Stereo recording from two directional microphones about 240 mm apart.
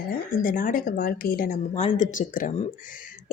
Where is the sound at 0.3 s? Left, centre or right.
Left.